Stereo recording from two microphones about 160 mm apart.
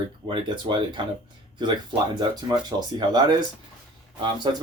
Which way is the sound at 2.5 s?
30° right (ahead or behind).